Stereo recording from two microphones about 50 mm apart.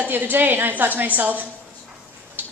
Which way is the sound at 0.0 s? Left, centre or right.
Right.